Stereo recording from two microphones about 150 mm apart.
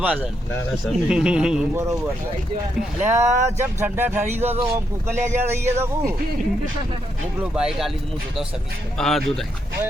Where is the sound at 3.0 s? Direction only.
15° right (ahead or behind).